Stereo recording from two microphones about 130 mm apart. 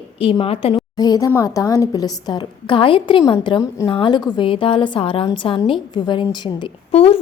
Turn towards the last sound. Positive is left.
turn(degrees=50)  # may be behind; listen again after turning